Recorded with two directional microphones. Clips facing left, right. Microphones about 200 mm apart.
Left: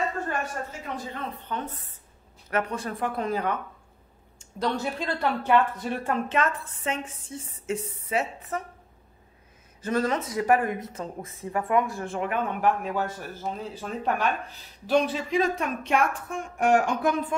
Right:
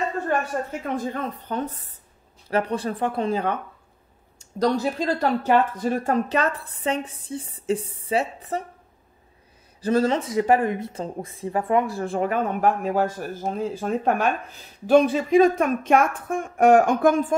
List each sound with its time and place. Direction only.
0.7 s speech: 50° right (ahead or behind); by 3.5 s 30° right (ahead or behind)
4.4 s speech: 40° right (ahead or behind)
9.8 s speech: 30° right (ahead or behind); by 17.4 s 45° right (ahead or behind)